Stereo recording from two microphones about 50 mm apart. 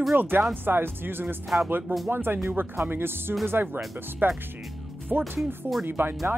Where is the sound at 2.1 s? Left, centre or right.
Right.